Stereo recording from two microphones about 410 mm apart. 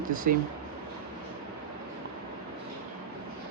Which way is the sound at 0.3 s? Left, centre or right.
Right.